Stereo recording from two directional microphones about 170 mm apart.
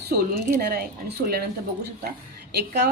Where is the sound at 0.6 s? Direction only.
65° right (ahead or behind).